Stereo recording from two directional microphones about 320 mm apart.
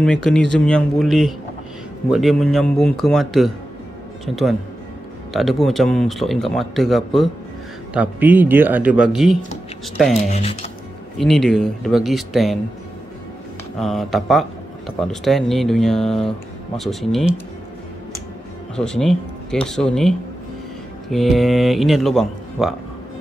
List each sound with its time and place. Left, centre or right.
0.0 s speech: centre
5.3 s speech: centre
10.3 s speech: centre
11.1 s speech: centre
13.7 s speech: centre
18.8 s speech: centre